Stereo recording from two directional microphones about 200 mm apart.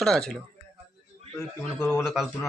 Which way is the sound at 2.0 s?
Centre (ahead or behind).